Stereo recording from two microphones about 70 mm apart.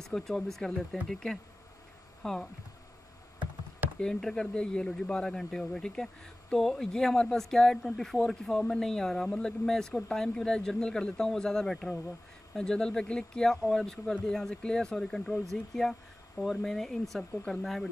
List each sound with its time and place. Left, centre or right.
0.0 s speech: centre
4.0 s speech: centre